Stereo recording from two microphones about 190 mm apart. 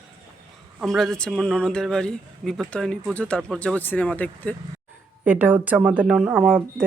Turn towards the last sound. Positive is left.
turn(degrees=-5)  # may be behind; listen again after turning